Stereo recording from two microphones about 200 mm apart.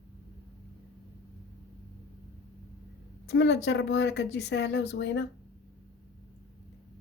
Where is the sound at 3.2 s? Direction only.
55° left (ahead or behind).